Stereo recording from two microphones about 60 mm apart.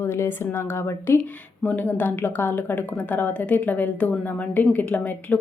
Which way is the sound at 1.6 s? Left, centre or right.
Left.